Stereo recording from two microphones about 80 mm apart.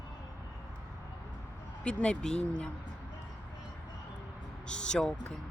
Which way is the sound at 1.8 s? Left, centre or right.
Centre.